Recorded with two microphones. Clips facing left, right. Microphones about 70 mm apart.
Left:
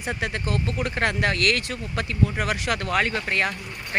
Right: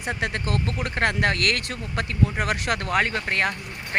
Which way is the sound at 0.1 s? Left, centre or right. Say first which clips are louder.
Right 1 dB; right.